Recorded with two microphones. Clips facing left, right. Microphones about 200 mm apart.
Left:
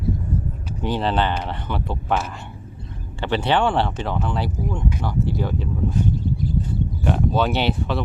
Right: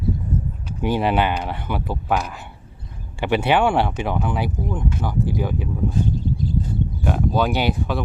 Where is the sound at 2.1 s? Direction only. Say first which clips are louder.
Right 1 dB; centre (ahead or behind).